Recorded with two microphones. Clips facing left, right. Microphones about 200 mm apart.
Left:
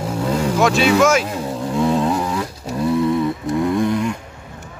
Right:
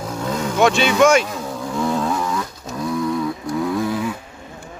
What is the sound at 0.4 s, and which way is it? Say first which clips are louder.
Vehicle: even; 5° left (ahead or behind).